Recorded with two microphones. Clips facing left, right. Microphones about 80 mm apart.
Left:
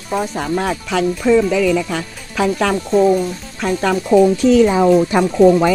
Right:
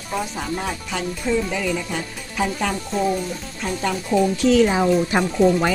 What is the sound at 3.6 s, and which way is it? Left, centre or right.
Speech, left.